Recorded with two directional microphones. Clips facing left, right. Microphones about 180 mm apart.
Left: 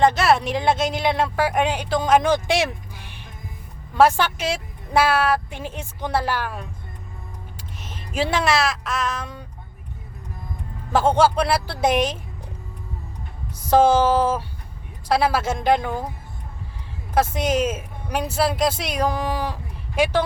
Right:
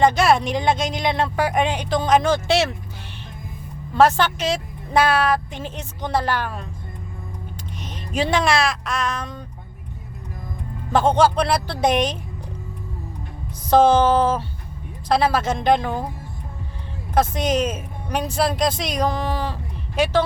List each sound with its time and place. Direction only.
0.0 s speech: centre (ahead or behind)
3.9 s a woman's voice: 10° left (ahead or behind)
7.8 s speech: 5° left (ahead or behind)
10.9 s a woman's voice: 5° left (ahead or behind)
13.7 s a woman's voice: 10° left (ahead or behind)
17.2 s a woman's voice: 5° left (ahead or behind)